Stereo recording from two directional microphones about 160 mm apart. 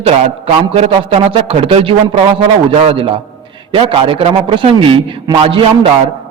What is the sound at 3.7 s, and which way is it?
A man's voice, 35° right (ahead or behind).